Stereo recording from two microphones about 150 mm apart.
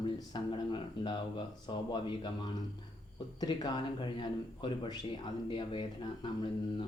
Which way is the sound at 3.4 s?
30° left (ahead or behind).